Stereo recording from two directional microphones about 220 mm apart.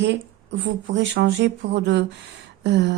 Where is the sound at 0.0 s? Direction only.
55° right (ahead or behind).